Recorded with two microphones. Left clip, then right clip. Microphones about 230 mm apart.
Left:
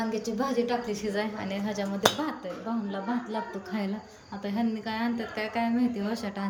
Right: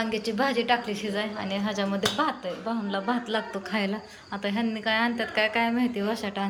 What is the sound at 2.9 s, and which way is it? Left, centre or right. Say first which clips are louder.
A woman's voice: right 5 dB; centre.